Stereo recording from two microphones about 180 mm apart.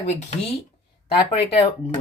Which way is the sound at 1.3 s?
30° left (ahead or behind).